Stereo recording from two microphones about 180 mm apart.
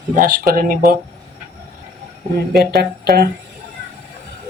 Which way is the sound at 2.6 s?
60° right (ahead or behind).